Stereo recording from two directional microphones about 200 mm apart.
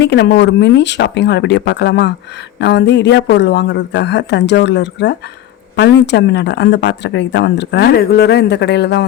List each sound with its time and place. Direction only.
0.0 s speech: 60° left (ahead or behind)